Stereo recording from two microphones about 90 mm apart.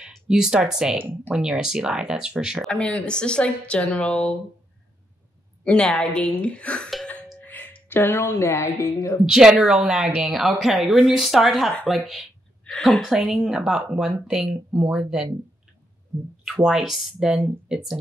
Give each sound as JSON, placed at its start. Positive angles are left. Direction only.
{"t": 0.0, "sound": "speech", "side_deg": -5}
{"t": 2.7, "sound": "a woman's voice", "side_deg": 10}
{"t": 5.6, "sound": "a woman's voice", "side_deg": 10}
{"t": 6.9, "sound": "music", "side_deg": 10}
{"t": 7.3, "sound": "speech", "side_deg": 20}
{"t": 9.2, "sound": "a woman's voice", "side_deg": -5}
{"t": 16.4, "sound": "a woman's voice", "side_deg": -5}